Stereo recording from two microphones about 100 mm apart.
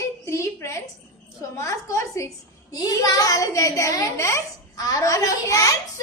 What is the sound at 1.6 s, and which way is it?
A woman's voice, 30° left (ahead or behind).